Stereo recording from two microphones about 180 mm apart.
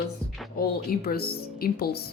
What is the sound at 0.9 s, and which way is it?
A woman's voice, 60° left (ahead or behind).